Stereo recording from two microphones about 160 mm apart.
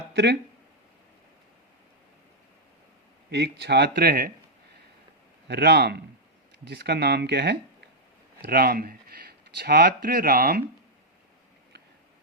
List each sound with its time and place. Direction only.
0.1 s speech: 90° right
3.2 s speech: 90° right; by 4.3 s 65° right (ahead or behind)
5.5 s speech: 90° right
8.4 s speech: 75° right (ahead or behind)